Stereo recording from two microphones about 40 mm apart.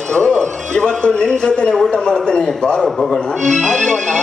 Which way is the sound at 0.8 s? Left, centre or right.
Centre.